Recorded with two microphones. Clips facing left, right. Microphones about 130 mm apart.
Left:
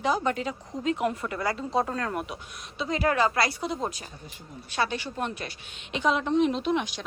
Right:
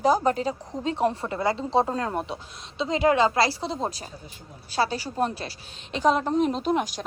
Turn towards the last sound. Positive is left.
turn(degrees=-40)  # may be behind; listen again after turning